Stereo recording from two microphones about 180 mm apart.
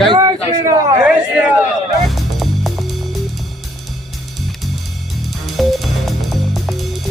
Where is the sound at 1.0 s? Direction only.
5° right (ahead or behind).